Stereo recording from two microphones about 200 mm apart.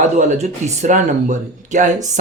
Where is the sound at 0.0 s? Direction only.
35° right (ahead or behind).